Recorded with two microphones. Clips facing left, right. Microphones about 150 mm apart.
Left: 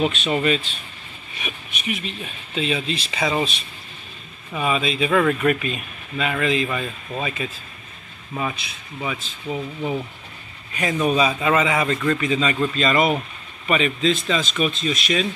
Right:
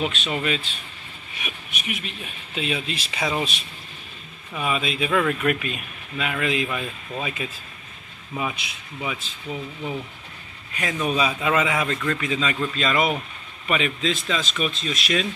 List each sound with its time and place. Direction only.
0.1 s speech: centre (ahead or behind)
4.6 s speech: centre (ahead or behind)
10.7 s a man's voice: centre (ahead or behind)